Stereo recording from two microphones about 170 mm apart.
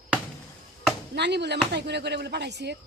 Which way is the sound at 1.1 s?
80° right.